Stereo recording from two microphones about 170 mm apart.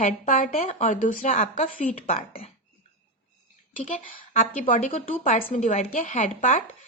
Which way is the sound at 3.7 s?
50° left (ahead or behind).